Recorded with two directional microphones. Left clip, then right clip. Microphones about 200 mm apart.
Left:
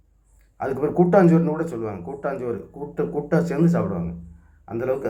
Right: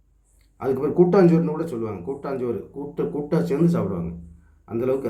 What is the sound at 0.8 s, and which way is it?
Speech, centre (ahead or behind).